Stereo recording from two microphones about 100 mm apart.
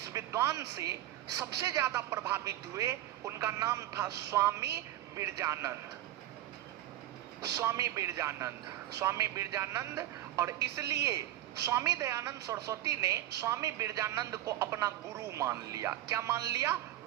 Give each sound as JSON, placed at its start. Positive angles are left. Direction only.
{"t": 0.1, "sound": "a woman's voice", "side_deg": -30}
{"t": 7.4, "sound": "a woman's voice", "side_deg": -30}